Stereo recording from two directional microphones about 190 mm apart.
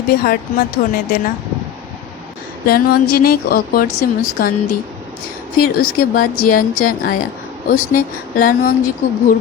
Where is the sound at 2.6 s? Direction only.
55° left (ahead or behind).